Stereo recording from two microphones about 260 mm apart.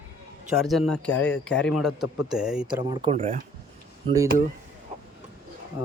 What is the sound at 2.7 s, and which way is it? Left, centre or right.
Speech, centre.